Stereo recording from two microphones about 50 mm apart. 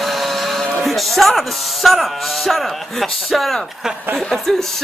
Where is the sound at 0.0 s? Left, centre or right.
Centre.